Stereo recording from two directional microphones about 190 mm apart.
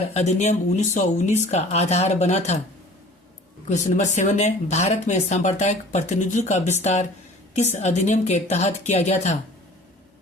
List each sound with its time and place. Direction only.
0.1 s speech: 35° left (ahead or behind)
3.7 s speech: 40° left (ahead or behind)